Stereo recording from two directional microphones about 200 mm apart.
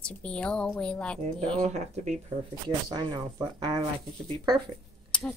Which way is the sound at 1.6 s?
35° right (ahead or behind).